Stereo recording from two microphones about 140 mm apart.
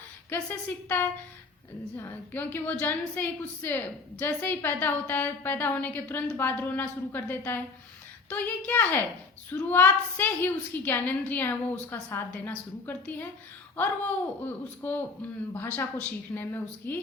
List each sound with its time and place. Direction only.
0.3 s a woman's voice: 15° left (ahead or behind)